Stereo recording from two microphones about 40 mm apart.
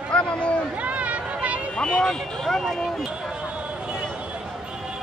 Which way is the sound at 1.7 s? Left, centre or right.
Left.